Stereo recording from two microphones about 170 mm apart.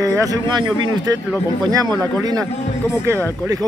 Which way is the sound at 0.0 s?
20° right (ahead or behind).